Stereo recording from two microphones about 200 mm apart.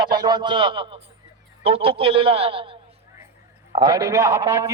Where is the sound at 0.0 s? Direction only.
20° right (ahead or behind).